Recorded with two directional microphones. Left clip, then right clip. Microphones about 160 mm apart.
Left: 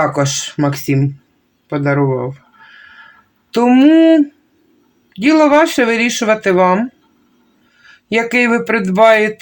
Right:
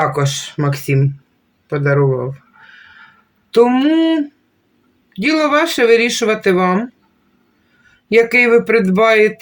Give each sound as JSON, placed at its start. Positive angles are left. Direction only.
{"t": 0.0, "sound": "speech", "side_deg": 25}
{"t": 3.5, "sound": "speech", "side_deg": 30}
{"t": 5.2, "sound": "speech", "side_deg": 30}
{"t": 8.1, "sound": "speech", "side_deg": 30}